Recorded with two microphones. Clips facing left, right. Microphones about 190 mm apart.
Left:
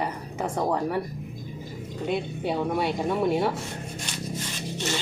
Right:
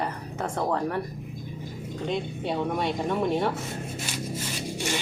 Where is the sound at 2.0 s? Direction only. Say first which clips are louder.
Left 2 dB; 5° left (ahead or behind).